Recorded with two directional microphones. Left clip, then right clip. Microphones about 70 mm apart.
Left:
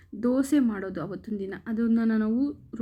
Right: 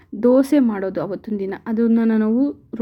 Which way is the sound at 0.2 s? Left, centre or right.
Right.